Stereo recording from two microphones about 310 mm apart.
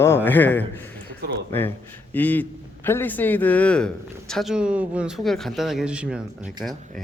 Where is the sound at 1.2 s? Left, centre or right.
Right.